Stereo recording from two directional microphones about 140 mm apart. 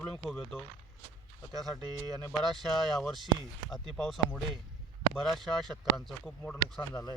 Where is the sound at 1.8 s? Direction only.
30° right (ahead or behind).